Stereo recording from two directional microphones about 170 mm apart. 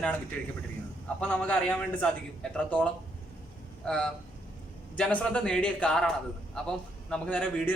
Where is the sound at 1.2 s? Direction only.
5° left (ahead or behind).